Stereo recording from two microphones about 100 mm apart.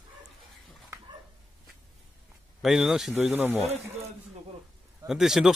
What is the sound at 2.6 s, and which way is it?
Speech, 5° right (ahead or behind).